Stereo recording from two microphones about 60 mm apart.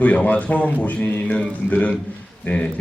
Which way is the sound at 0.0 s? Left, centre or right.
Left.